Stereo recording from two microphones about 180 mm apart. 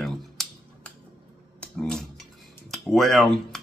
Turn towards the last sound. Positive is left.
turn(degrees=0)  # may be behind; listen again after turning